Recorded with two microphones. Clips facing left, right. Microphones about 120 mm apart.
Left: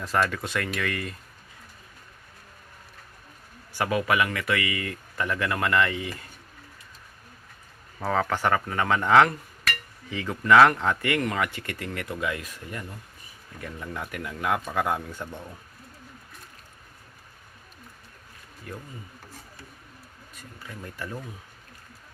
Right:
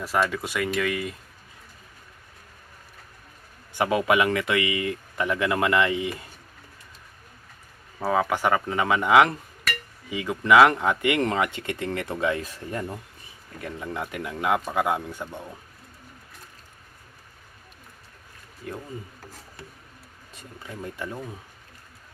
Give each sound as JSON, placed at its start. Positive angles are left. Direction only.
{"t": 0.0, "sound": "speech", "side_deg": -10}
{"t": 3.7, "sound": "speech", "side_deg": -20}
{"t": 7.9, "sound": "speech", "side_deg": -10}
{"t": 13.6, "sound": "speech", "side_deg": -20}
{"t": 18.6, "sound": "speech", "side_deg": -20}
{"t": 21.0, "sound": "speech", "side_deg": -20}